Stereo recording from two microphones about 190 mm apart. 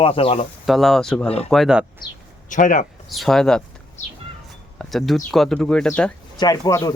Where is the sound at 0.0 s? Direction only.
30° left (ahead or behind).